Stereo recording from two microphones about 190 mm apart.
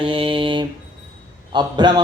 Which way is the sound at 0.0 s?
25° right (ahead or behind).